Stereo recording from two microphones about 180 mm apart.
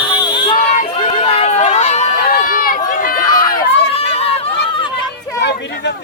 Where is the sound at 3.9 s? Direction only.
35° left (ahead or behind).